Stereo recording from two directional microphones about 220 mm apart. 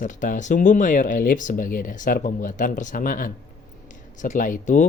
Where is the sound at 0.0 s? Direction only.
35° left (ahead or behind).